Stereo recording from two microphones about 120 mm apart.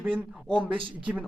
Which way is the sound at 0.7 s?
45° right (ahead or behind).